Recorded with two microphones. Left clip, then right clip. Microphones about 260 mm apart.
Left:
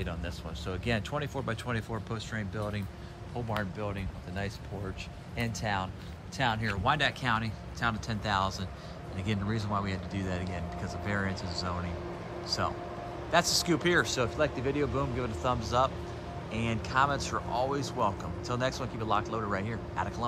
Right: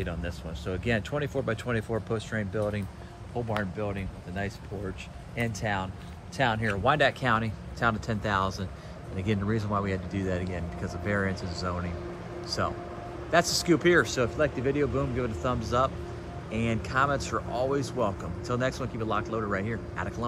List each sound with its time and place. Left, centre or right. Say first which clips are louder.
0.0 s speech: right 3 dB; centre
12.4 s speech: right 2 dB; centre